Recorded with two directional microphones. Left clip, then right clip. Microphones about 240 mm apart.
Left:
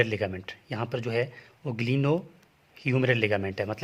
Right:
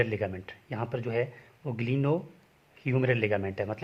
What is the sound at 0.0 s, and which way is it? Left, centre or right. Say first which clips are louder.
Speech: left 3 dB; left.